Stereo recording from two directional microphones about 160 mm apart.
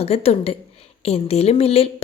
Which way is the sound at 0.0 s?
40° left (ahead or behind).